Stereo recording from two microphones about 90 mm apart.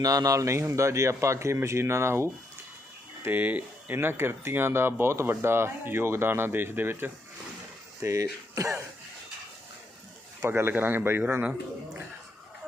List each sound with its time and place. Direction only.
0.0 s speech: 40° right (ahead or behind); by 7.1 s 25° right (ahead or behind)
8.0 s speech: 35° right (ahead or behind)
10.4 s speech: 25° right (ahead or behind)